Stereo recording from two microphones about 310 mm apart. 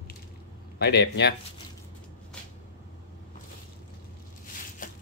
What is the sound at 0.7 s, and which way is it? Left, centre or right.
Speech, left.